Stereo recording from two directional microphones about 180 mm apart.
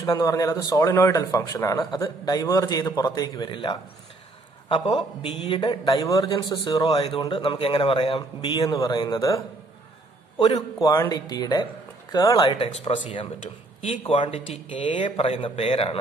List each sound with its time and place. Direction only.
0.0 s a man's voice: 20° left (ahead or behind)
10.4 s speech: 25° left (ahead or behind)